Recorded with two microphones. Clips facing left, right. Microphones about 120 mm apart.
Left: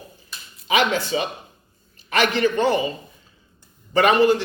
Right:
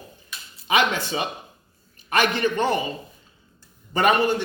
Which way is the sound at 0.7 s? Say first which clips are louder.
Left 2 dB; 50° right (ahead or behind).